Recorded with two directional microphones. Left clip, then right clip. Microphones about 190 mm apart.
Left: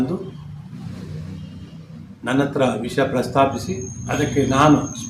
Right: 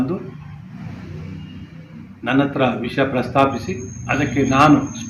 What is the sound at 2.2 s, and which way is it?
A man's voice, 15° left (ahead or behind).